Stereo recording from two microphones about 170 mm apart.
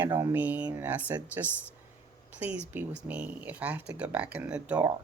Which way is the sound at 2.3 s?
10° right (ahead or behind).